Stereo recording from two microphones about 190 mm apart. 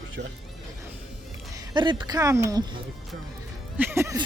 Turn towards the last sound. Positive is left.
turn(degrees=-15)  # may be behind; listen again after turning